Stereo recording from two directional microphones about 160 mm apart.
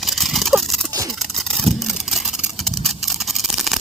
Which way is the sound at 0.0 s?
Centre (ahead or behind).